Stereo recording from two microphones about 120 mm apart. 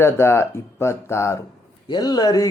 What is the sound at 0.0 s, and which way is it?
Speech, 20° left (ahead or behind).